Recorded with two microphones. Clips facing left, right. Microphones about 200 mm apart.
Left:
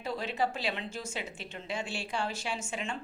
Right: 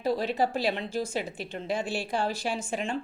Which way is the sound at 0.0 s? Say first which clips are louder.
Right 6 dB; 35° right (ahead or behind).